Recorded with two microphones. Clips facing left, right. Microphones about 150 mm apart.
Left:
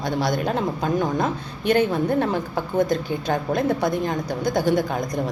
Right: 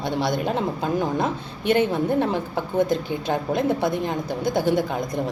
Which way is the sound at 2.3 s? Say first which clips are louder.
Left 1 dB; 25° right (ahead or behind).